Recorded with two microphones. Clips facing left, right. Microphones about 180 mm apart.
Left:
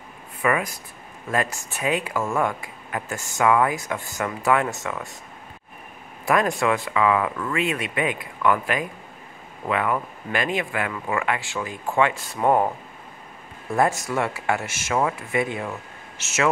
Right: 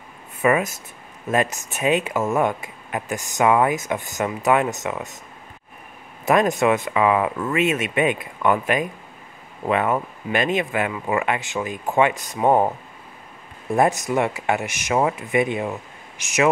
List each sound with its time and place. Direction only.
0.4 s speech: 25° right (ahead or behind)
6.2 s speech: 20° right (ahead or behind)
13.7 s speech: 20° right (ahead or behind)